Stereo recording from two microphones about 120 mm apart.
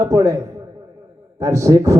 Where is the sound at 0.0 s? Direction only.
25° right (ahead or behind).